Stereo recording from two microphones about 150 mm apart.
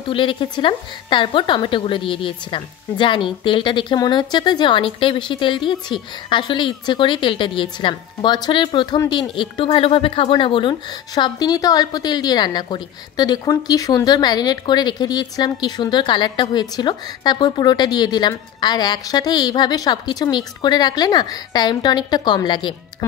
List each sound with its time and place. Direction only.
0.1 s a woman's voice: 35° left (ahead or behind)